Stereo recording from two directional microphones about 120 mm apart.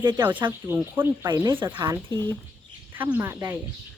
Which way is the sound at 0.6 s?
20° right (ahead or behind).